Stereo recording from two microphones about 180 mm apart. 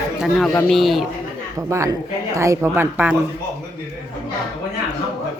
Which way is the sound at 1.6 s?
15° right (ahead or behind).